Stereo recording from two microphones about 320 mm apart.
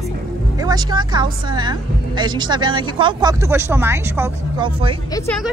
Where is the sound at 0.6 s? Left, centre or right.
Centre.